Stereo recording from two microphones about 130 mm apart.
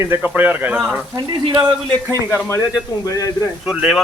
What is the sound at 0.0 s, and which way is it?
Speech, 15° right (ahead or behind).